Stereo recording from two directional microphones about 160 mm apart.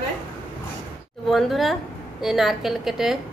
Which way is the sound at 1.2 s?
Centre (ahead or behind).